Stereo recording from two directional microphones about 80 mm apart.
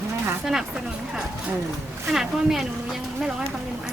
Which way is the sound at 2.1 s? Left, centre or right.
Centre.